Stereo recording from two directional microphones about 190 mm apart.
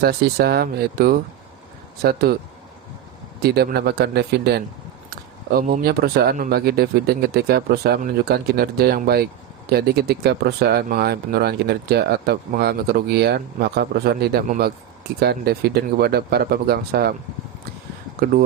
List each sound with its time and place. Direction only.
0.0 s speech: 55° right (ahead or behind)
3.4 s speech: 60° right (ahead or behind)